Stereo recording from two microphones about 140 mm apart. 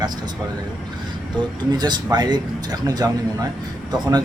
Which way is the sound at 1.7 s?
30° right (ahead or behind).